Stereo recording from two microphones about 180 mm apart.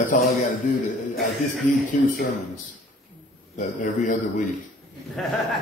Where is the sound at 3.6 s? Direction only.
45° left (ahead or behind).